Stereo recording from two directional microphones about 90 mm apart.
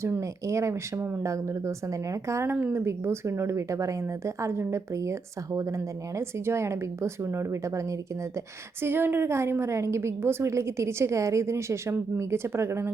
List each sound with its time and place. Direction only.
0.0 s a woman's voice: 35° right (ahead or behind)
8.8 s a woman's voice: 25° right (ahead or behind)